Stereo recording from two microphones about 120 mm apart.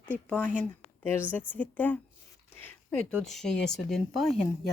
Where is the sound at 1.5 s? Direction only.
15° left (ahead or behind).